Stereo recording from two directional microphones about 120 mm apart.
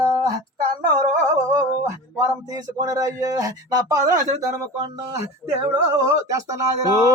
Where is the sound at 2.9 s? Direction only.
30° right (ahead or behind).